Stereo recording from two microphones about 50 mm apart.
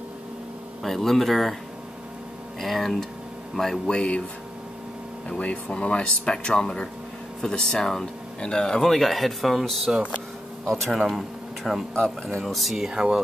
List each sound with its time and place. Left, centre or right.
0.8 s speech: centre
2.6 s speech: centre
3.8 s speech: centre
5.4 s speech: left; by 11.8 s centre
11.9 s speech: centre
12.4 s speech: centre